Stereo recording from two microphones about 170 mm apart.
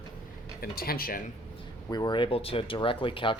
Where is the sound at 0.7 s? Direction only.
60° left (ahead or behind).